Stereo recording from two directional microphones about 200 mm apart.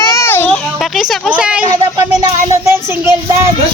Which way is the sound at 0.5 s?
Centre (ahead or behind).